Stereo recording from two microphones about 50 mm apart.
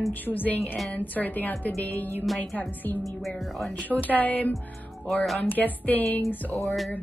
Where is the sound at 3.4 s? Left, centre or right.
Centre.